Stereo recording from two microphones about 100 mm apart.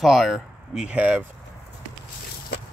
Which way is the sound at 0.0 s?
Centre (ahead or behind).